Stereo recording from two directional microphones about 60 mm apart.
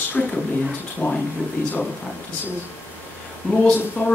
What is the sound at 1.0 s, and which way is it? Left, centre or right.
Speech, left.